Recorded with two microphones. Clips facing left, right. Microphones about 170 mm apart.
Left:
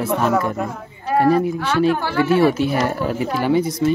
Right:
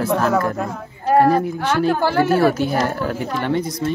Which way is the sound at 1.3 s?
35° right (ahead or behind).